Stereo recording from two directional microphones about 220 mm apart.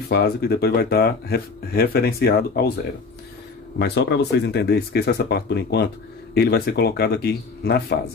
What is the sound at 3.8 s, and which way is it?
Speech, 50° left (ahead or behind).